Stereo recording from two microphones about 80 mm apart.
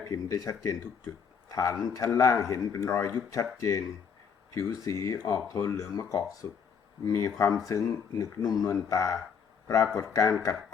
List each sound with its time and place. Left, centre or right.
0.0 s speech: left